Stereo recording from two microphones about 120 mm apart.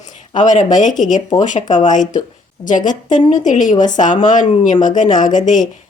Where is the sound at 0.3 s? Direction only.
90° left.